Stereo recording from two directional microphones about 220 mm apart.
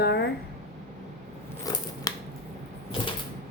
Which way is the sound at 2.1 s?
15° left (ahead or behind).